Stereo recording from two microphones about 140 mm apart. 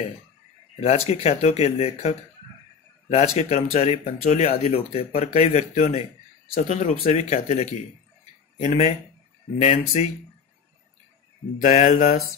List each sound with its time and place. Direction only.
0.7 s speech: 50° left (ahead or behind)
8.5 s mantra: 65° left (ahead or behind)
9.6 s speech: 50° left (ahead or behind)
11.6 s mantra: 60° left (ahead or behind)